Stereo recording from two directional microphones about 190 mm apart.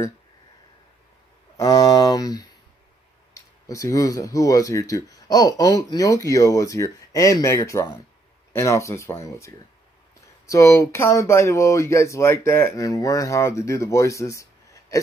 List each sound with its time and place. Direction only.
1.6 s speech: 20° left (ahead or behind)